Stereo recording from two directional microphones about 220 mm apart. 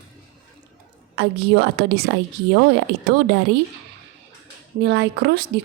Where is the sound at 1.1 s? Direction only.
50° right (ahead or behind).